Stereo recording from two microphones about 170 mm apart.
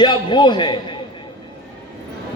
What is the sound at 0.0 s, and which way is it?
Speech, 25° left (ahead or behind).